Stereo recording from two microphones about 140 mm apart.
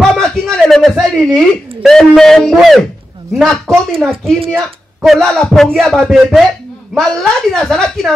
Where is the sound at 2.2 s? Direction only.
Centre (ahead or behind).